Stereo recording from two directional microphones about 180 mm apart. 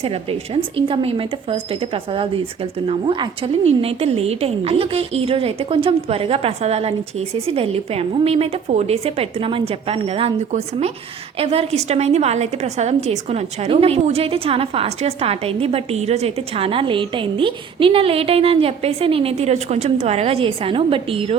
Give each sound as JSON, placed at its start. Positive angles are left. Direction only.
{"t": 0.0, "sound": "a woman's voice", "side_deg": -30}